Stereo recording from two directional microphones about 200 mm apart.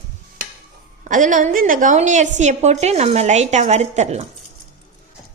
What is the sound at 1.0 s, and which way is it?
A woman's voice, 40° right (ahead or behind).